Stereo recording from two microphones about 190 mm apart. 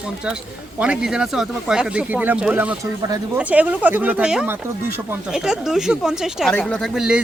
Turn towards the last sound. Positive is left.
turn(degrees=-5)  # may be behind; listen again after turning